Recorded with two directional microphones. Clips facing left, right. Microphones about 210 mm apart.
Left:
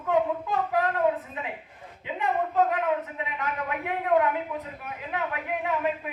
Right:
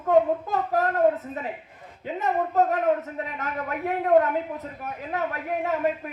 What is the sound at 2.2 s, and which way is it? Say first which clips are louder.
A man's voice: right 2 dB; 45° right (ahead or behind).